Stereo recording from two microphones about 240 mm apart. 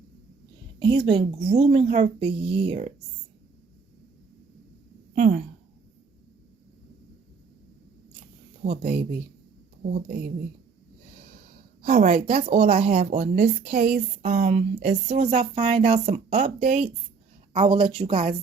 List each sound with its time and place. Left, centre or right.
0.8 s speech: centre
5.1 s speech: right
8.6 s speech: right
11.9 s a woman's voice: right
12.4 s speech: right